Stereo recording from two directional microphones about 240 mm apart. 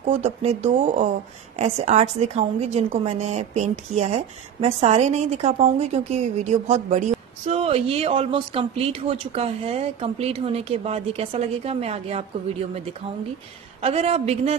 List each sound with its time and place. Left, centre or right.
0.1 s a woman's voice: right
13.7 s a woman's voice: right